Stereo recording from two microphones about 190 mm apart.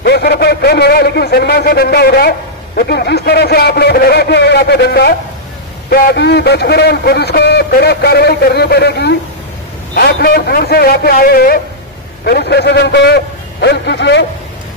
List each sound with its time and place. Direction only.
0.0 s a man's voice: 60° left (ahead or behind)